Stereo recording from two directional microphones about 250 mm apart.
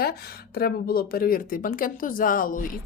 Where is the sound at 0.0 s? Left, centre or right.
Left.